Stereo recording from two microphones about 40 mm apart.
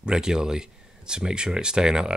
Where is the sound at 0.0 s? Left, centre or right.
Centre.